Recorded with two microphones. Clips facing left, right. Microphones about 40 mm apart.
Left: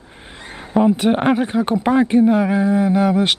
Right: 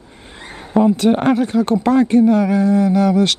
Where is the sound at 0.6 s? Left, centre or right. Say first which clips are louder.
Right 1 dB; centre.